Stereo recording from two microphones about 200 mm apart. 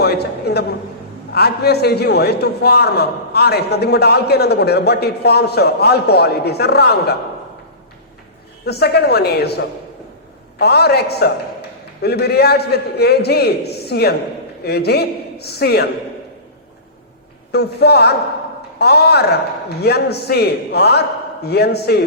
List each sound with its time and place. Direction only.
0.0 s a man's voice: 55° left (ahead or behind)
8.6 s a man's voice: 55° left (ahead or behind)
17.5 s a man's voice: 55° left (ahead or behind)